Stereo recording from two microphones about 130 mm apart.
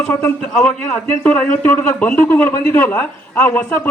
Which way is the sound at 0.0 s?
20° left (ahead or behind).